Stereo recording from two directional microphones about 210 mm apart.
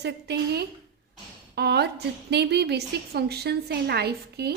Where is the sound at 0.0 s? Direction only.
50° right (ahead or behind).